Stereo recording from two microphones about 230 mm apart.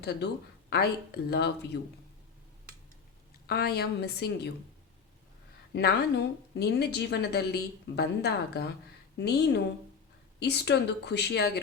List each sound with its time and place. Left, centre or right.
0.0 s a woman's voice: left
3.4 s a woman's voice: left
5.7 s a woman's voice: left